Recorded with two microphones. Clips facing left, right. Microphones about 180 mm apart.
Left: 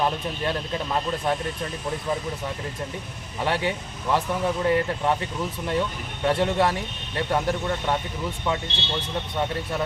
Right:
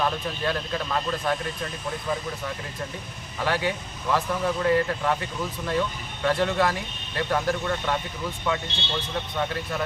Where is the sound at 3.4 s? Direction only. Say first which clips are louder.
Left 1 dB; 25° left (ahead or behind).